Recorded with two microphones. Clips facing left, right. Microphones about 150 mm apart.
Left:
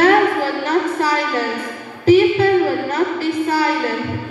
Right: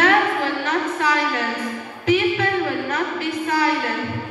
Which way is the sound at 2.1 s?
35° left (ahead or behind).